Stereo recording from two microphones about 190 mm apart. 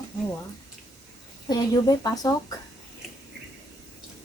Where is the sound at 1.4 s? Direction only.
20° left (ahead or behind).